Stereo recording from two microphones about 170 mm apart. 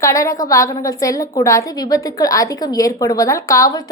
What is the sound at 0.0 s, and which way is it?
A woman's voice, 20° left (ahead or behind).